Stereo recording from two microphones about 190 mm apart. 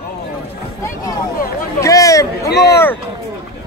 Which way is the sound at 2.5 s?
60° left (ahead or behind).